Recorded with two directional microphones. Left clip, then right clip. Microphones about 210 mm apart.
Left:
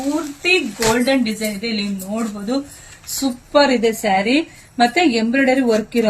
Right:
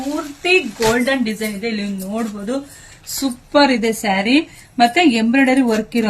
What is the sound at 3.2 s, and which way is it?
A woman's voice, 45° right (ahead or behind).